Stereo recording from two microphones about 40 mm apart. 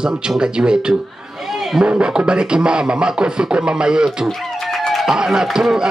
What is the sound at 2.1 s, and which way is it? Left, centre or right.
Speech, right.